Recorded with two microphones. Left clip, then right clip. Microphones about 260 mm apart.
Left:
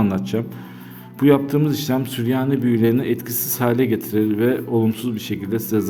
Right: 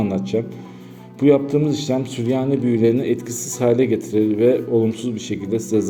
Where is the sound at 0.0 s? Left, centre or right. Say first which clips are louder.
Right 1 dB; centre.